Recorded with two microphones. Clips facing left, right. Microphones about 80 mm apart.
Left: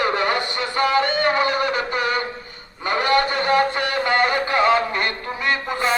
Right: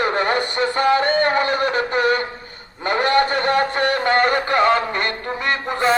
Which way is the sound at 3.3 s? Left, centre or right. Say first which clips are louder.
Even; right.